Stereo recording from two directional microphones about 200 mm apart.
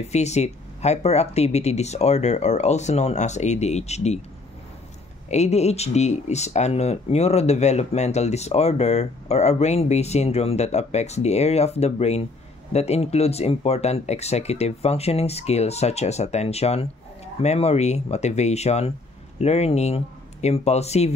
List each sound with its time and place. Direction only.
0.0 s speech: 35° left (ahead or behind)
5.3 s speech: 35° left (ahead or behind)